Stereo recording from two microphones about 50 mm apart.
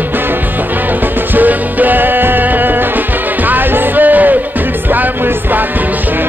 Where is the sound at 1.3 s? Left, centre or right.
Right.